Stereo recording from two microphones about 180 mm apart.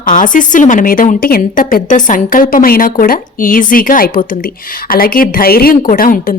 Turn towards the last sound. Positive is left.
turn(degrees=50)  # may be behind; listen again after turning